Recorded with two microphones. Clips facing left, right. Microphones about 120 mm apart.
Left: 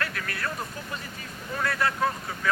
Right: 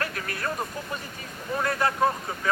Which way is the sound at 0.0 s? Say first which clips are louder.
Right 1 dB; 30° right (ahead or behind).